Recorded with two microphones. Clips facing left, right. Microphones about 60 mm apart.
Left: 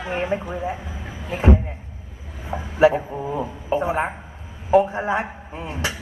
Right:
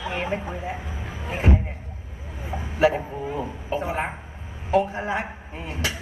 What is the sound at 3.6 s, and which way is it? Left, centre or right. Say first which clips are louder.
A woman's voice: left 6 dB; left.